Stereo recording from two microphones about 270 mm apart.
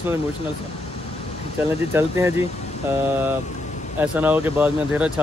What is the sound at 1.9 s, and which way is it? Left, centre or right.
Speech, centre.